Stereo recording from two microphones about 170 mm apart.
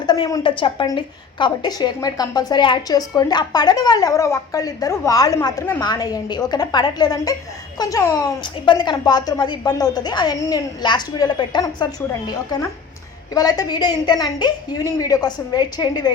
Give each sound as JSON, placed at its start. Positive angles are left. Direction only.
{"t": 0.0, "sound": "a woman's voice", "side_deg": 25}
{"t": 13.3, "sound": "a woman's voice", "side_deg": 20}